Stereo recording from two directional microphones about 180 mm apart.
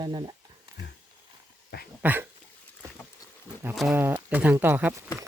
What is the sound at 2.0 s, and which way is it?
Speech, 10° right (ahead or behind).